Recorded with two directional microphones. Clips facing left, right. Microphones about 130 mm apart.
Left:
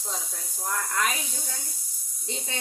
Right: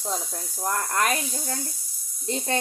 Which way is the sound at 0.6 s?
55° right (ahead or behind).